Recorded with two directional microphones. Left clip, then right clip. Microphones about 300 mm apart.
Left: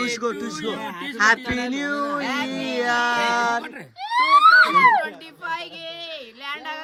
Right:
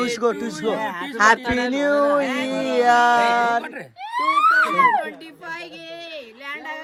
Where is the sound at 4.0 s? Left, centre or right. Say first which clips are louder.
Left 4 dB; left.